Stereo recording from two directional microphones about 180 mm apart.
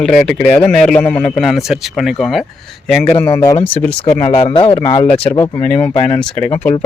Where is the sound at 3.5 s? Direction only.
30° left (ahead or behind).